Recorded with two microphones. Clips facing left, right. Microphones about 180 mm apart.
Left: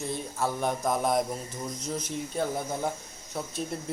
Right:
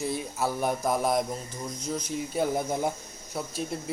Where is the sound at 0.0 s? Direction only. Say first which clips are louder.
Right 1 dB; 10° right (ahead or behind).